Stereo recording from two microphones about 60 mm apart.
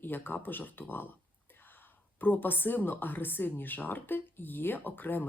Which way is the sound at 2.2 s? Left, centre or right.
Left.